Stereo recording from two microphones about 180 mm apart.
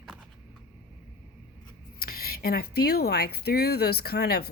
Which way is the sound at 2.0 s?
55° left (ahead or behind).